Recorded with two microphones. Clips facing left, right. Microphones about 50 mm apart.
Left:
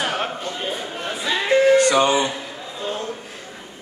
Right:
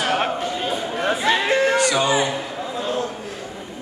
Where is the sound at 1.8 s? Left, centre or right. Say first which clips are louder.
Left 3 dB; left.